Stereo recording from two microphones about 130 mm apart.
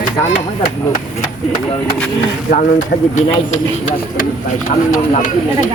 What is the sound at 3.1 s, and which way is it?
Speech, 70° left (ahead or behind).